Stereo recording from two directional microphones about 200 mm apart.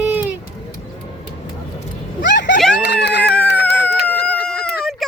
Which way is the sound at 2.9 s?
55° left (ahead or behind).